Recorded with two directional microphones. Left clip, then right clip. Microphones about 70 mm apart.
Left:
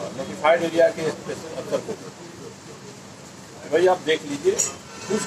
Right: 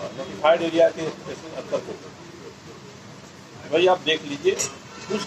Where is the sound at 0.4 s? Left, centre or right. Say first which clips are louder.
Even; right.